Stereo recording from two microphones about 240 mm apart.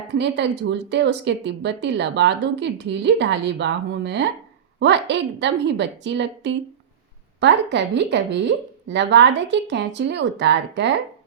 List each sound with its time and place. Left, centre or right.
0.1 s speech: right